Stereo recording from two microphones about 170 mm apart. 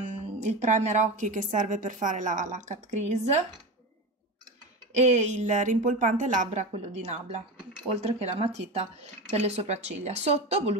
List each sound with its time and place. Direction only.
0.0 s speech: 45° right (ahead or behind)
4.9 s a woman's voice: 40° right (ahead or behind)